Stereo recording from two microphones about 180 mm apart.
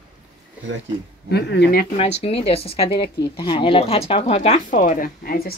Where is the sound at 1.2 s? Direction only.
65° left (ahead or behind).